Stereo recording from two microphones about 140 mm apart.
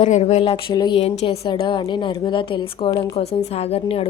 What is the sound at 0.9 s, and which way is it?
A woman's voice, 45° left (ahead or behind).